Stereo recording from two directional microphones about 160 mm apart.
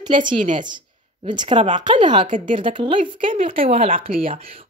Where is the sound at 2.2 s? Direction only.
55° right (ahead or behind).